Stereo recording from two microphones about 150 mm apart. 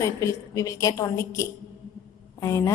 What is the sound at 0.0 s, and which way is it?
A woman's voice, 20° left (ahead or behind).